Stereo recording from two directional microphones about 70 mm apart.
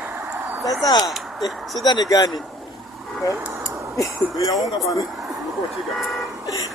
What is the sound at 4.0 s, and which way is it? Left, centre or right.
Speech, left.